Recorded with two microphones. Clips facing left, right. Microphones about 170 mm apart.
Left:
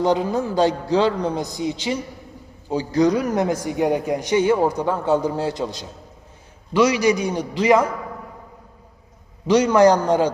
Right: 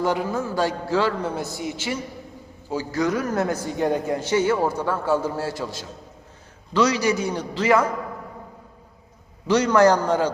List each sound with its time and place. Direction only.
0.0 s a man's voice: 20° left (ahead or behind)
9.5 s a man's voice: 10° left (ahead or behind)